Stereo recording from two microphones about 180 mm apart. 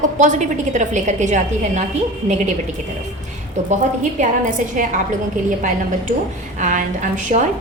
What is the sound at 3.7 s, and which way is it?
A woman's voice, 45° right (ahead or behind).